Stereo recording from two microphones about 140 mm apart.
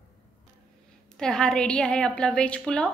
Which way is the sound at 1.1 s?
5° left (ahead or behind).